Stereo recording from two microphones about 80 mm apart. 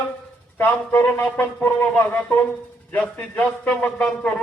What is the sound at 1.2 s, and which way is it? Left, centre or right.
A man's voice, centre.